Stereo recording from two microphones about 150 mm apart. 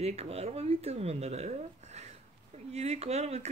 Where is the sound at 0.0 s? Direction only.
45° right (ahead or behind).